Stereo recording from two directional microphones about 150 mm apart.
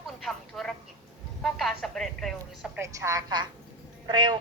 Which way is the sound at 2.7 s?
20° right (ahead or behind).